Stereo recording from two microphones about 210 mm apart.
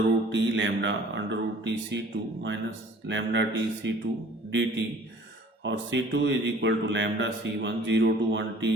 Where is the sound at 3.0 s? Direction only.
60° right (ahead or behind).